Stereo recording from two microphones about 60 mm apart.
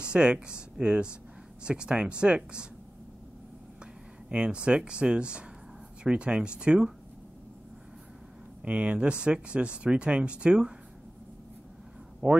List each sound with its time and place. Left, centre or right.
0.0 s speech: centre
3.8 s speech: centre
8.6 s speech: right
12.2 s speech: centre